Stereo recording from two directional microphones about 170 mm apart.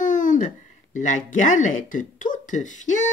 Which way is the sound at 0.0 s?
50° left (ahead or behind).